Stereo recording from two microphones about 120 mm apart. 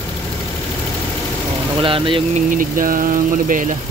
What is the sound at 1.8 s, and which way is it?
Speech, 45° right (ahead or behind).